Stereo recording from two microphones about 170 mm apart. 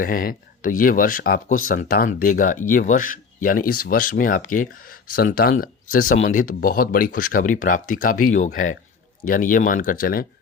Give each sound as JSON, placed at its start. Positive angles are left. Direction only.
{"t": 0.0, "sound": "speech", "side_deg": 55}